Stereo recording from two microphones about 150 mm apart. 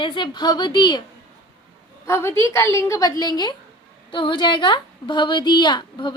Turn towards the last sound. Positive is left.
turn(degrees=30)  # may be behind; listen again after turning